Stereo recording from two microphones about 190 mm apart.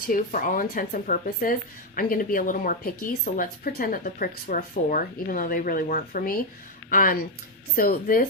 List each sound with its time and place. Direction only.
0.0 s speech: 45° left (ahead or behind)